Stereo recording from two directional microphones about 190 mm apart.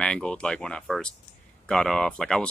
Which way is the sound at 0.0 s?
5° left (ahead or behind).